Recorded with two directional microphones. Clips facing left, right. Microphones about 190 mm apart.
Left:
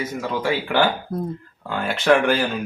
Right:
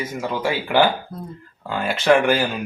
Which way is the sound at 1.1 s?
55° left (ahead or behind).